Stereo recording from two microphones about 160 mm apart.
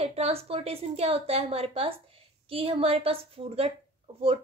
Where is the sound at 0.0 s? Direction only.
40° right (ahead or behind).